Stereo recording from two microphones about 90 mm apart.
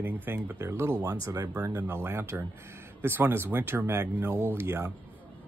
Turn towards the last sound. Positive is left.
turn(degrees=-25)  # may be behind; listen again after turning